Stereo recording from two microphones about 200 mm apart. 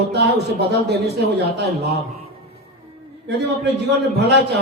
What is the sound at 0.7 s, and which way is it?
Speech, 55° right (ahead or behind).